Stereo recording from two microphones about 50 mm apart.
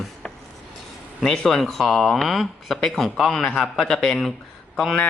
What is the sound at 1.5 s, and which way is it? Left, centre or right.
Speech, centre.